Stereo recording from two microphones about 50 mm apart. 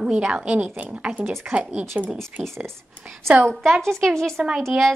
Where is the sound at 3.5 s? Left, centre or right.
Centre.